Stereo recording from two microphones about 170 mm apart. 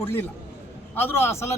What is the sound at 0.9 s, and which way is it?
Speech, 15° left (ahead or behind).